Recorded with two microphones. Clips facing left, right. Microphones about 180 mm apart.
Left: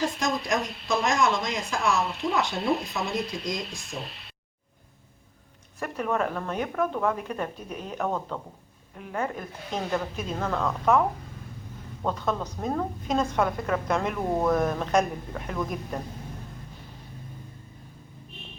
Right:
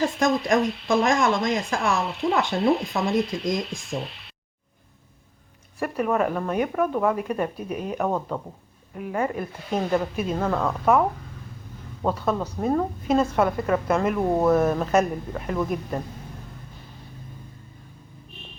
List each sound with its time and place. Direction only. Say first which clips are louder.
0.2 s speech: right 6 dB; 55° right (ahead or behind)
5.8 s speech: right 4 dB; 10° right (ahead or behind)
12.0 s a woman's voice: right 4 dB; 10° right (ahead or behind)